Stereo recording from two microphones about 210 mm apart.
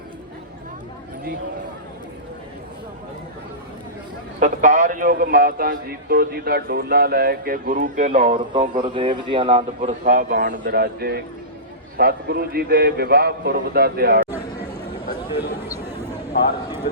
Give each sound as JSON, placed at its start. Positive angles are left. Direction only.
{"t": 4.4, "sound": "a man's voice", "side_deg": -35}
{"t": 15.4, "sound": "speech", "side_deg": -10}
{"t": 16.3, "sound": "speech", "side_deg": 50}